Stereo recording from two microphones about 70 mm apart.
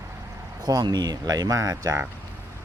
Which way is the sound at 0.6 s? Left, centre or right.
Right.